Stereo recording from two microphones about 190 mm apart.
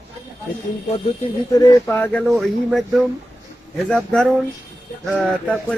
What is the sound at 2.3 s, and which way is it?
Speech, centre (ahead or behind).